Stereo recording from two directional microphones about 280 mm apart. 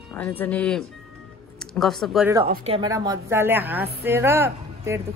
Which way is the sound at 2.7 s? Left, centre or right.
Centre.